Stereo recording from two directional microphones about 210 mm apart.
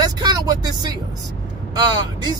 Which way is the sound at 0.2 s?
20° right (ahead or behind).